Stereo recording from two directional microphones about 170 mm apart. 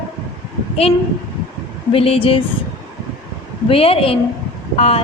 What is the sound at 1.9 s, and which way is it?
Speech, 35° left (ahead or behind).